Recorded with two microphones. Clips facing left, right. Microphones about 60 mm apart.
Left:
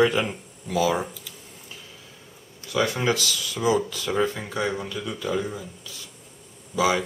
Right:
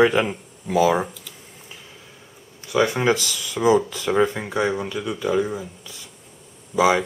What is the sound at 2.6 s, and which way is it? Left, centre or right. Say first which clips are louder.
Speech: right 4 dB; centre.